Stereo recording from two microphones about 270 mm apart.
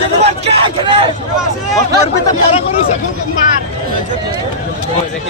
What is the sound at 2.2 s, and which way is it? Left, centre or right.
Speech, left.